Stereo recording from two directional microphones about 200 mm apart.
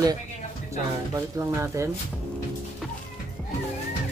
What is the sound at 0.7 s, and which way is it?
Speech, 15° right (ahead or behind).